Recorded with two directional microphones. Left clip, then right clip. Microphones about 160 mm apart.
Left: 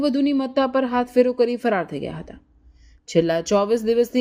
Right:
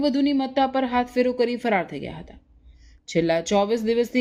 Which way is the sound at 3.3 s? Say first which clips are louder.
Right 1 dB; 20° left (ahead or behind).